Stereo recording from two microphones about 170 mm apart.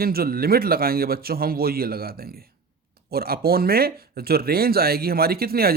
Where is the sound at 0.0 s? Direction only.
65° right (ahead or behind).